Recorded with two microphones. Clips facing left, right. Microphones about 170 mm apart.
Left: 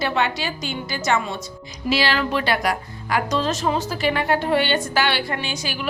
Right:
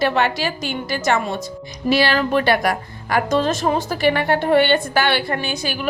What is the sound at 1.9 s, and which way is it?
A woman's voice, 55° right (ahead or behind).